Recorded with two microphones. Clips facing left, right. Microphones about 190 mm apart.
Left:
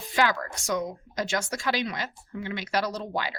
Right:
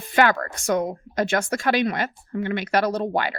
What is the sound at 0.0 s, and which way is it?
A woman's voice, 60° right (ahead or behind).